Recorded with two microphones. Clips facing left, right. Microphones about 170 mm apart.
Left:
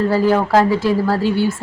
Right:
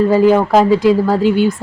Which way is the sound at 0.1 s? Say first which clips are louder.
Right 4 dB; 15° right (ahead or behind).